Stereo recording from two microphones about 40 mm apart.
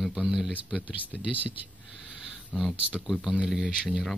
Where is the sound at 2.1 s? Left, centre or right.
Centre.